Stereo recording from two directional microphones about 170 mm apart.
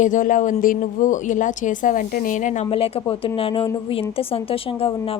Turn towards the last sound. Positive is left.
turn(degrees=35)  # may be behind; listen again after turning